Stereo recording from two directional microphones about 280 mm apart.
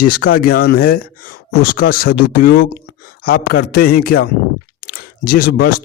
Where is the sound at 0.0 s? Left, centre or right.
Left.